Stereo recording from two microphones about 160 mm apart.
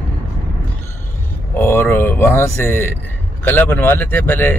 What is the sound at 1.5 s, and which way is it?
Speech, 15° left (ahead or behind).